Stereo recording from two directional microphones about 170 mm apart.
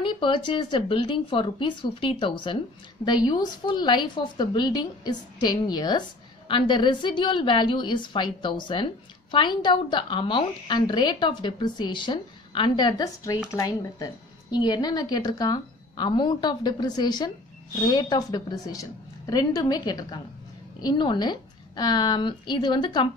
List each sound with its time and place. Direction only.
0.0 s a woman's voice: 30° left (ahead or behind)